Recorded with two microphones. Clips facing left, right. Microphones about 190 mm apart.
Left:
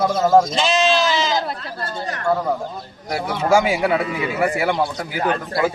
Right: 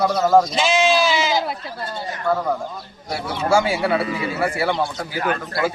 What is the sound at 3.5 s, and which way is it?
Speech, 15° left (ahead or behind).